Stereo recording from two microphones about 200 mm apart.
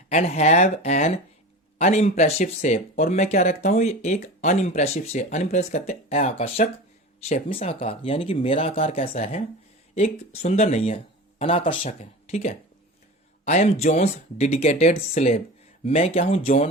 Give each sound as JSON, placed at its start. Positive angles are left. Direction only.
{"t": 0.1, "sound": "speech", "side_deg": 35}